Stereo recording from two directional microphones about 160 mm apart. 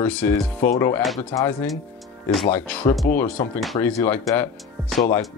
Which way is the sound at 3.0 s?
15° left (ahead or behind).